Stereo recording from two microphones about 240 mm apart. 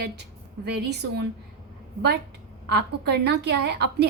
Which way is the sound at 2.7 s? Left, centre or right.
Right.